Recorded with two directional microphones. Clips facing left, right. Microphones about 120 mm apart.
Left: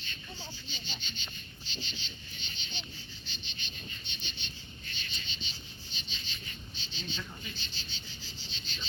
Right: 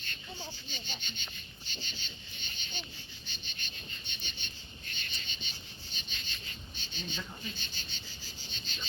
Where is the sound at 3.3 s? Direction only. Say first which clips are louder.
Left 1 dB; 50° right (ahead or behind).